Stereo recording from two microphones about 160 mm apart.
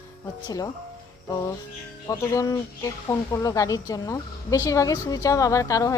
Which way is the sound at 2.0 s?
20° left (ahead or behind).